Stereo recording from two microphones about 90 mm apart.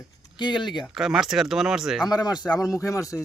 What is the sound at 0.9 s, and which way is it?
Speech, 5° right (ahead or behind).